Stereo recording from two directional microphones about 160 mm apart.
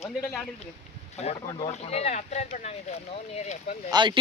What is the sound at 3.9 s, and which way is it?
Speech, 30° right (ahead or behind).